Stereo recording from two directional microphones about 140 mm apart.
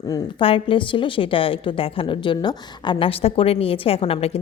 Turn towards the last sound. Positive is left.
turn(degrees=45)  # may be behind; listen again after turning